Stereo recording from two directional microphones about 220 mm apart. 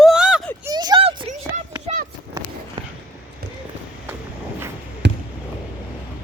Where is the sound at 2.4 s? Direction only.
20° right (ahead or behind).